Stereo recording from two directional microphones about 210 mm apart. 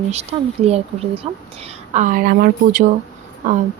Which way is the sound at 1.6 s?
35° right (ahead or behind).